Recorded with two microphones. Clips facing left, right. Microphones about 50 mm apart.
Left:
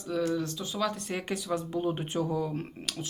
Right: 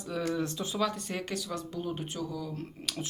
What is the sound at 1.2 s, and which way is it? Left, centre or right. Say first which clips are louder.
Speech: left 4 dB; centre.